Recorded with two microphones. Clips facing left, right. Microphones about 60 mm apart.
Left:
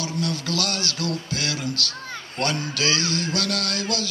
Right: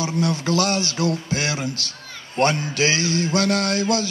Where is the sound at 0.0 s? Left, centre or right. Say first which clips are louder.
Right 5 dB; right.